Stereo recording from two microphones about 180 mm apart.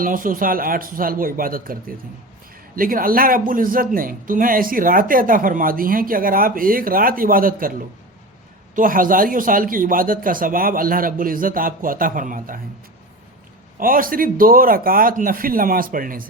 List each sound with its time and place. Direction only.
0.0 s speech: 50° right (ahead or behind)
8.7 s speech: 50° right (ahead or behind)
13.7 s speech: 50° right (ahead or behind)